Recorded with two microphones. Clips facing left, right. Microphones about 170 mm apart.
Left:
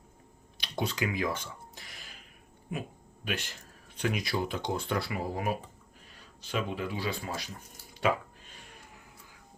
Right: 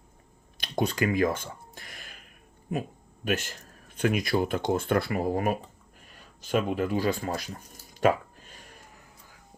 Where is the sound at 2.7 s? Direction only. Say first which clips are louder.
Right 6 dB; 45° right (ahead or behind).